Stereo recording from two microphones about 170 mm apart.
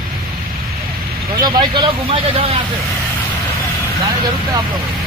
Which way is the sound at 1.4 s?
25° right (ahead or behind).